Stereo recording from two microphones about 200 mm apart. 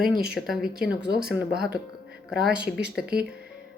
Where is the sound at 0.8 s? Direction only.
50° right (ahead or behind).